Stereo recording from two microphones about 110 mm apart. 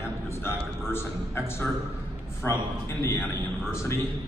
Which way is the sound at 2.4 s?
25° left (ahead or behind).